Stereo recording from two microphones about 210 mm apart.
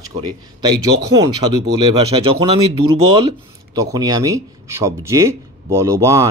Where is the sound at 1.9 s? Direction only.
25° right (ahead or behind).